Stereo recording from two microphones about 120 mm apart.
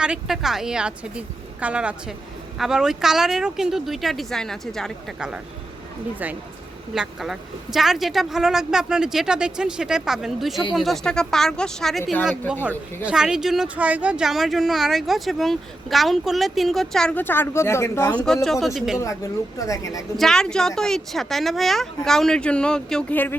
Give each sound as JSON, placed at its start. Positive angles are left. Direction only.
{"t": 0.0, "sound": "a woman's voice", "side_deg": -5}
{"t": 6.9, "sound": "speech", "side_deg": -5}
{"t": 18.1, "sound": "speech", "side_deg": 10}
{"t": 18.6, "sound": "speech", "side_deg": 0}
{"t": 18.9, "sound": "speech", "side_deg": 25}
{"t": 20.1, "sound": "speech", "side_deg": 5}